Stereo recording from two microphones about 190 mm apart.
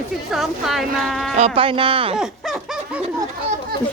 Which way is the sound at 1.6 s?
25° right (ahead or behind).